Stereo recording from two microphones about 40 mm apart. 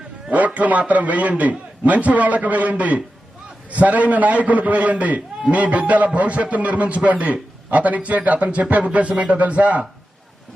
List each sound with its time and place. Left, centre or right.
0.3 s a man's voice: right